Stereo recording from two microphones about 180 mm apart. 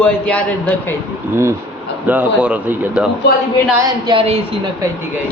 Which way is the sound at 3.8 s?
25° right (ahead or behind).